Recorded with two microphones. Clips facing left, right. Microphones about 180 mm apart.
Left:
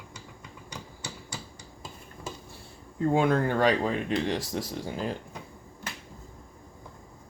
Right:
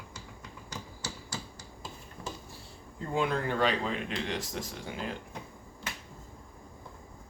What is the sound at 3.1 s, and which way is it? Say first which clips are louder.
Speech: left 4 dB; 45° left (ahead or behind).